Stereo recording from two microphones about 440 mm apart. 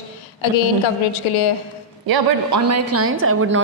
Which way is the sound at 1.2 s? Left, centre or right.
Left.